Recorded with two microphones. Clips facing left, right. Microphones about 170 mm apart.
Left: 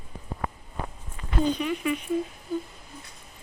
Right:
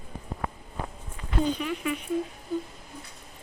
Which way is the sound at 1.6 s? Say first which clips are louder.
Left 3 dB; 5° left (ahead or behind).